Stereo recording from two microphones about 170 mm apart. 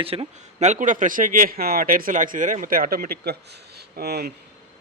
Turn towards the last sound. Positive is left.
turn(degrees=-70)  # may be behind; listen again after turning